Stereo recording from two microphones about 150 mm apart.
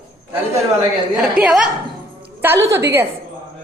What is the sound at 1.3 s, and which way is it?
Speech, 5° right (ahead or behind).